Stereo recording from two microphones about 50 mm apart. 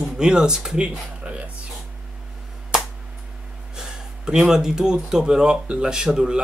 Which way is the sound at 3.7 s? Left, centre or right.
Centre.